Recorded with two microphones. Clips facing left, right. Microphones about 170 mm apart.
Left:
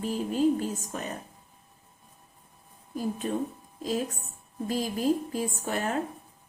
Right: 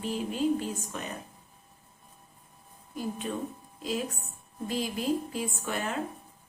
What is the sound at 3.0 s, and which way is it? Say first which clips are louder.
Speech: left 3 dB; 40° left (ahead or behind).